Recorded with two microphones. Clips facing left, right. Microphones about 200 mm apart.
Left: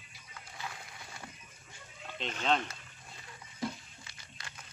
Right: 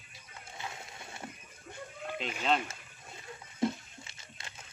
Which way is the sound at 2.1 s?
10° right (ahead or behind).